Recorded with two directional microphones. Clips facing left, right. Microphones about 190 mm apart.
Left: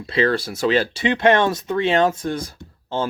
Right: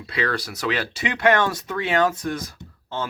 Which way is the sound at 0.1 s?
25° left (ahead or behind).